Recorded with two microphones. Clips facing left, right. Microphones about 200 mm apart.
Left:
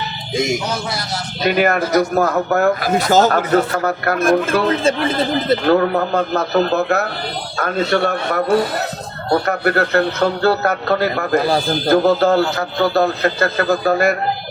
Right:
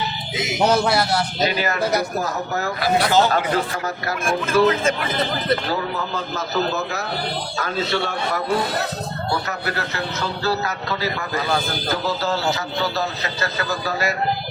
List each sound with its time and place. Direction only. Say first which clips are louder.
0.3 s speech: left 9 dB; 45° left (ahead or behind)
0.6 s a man's voice: right 6 dB; 60° right (ahead or behind)
1.4 s a man's voice: left 10 dB; 60° left (ahead or behind)
3.8 s a man's voice: left 7 dB; 60° left (ahead or behind)
4.8 s speech: left 5 dB; 30° left (ahead or behind)
5.6 s a man's voice: left 10 dB; 60° left (ahead or behind)